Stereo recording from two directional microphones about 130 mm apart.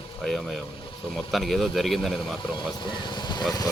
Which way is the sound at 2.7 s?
35° left (ahead or behind).